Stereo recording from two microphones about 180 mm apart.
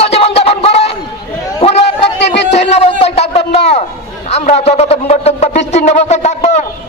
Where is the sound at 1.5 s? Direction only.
35° left (ahead or behind).